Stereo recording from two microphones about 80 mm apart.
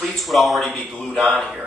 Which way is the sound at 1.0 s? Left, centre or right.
Centre.